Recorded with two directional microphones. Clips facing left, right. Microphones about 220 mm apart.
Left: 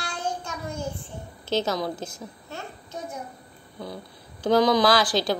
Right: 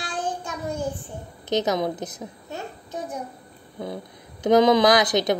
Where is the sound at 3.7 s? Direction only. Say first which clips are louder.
Right 4 dB; 20° right (ahead or behind).